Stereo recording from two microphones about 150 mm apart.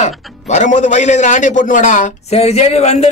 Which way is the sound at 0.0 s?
50° left (ahead or behind).